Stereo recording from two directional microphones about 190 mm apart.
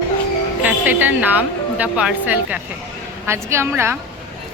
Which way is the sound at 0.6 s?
10° right (ahead or behind).